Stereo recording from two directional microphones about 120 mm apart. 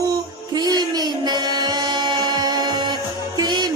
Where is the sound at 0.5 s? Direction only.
35° right (ahead or behind).